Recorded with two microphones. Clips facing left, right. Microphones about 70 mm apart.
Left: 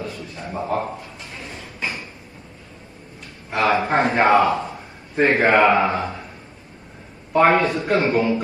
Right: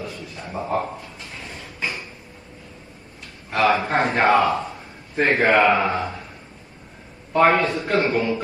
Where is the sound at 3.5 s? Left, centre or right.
Left.